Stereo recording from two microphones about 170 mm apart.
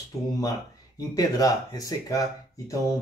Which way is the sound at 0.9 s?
20° left (ahead or behind).